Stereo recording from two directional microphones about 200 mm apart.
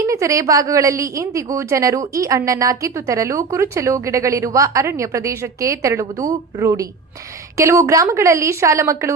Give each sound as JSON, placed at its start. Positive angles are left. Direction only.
{"t": 0.0, "sound": "a woman's voice", "side_deg": -15}